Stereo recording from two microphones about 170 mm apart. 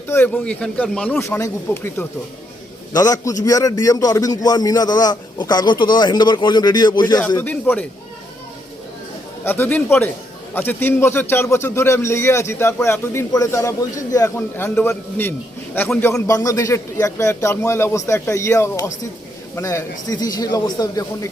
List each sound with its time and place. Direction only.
0.1 s a man's voice: 10° left (ahead or behind)
7.3 s a man's voice: 10° left (ahead or behind)
9.4 s a man's voice: 10° left (ahead or behind)